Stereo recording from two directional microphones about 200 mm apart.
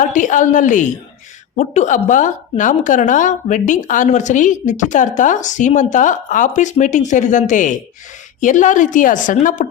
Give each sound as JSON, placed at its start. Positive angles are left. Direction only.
{"t": 0.0, "sound": "a woman's voice", "side_deg": 40}